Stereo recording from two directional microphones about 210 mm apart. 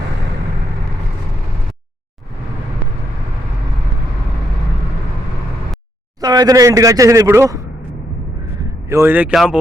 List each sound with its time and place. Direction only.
6.2 s speech: 20° right (ahead or behind)
8.6 s speech: 15° right (ahead or behind)